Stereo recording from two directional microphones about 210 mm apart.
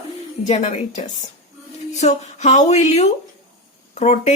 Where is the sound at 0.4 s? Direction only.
35° left (ahead or behind).